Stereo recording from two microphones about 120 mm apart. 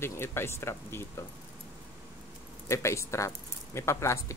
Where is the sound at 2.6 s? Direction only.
25° left (ahead or behind).